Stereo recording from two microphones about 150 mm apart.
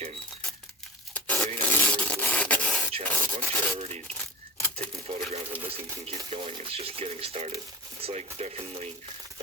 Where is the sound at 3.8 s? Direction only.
45° right (ahead or behind).